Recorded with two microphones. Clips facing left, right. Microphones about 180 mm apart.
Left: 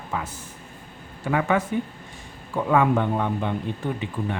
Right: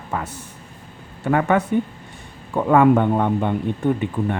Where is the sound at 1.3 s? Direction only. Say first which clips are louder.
Right 4 dB; 55° right (ahead or behind).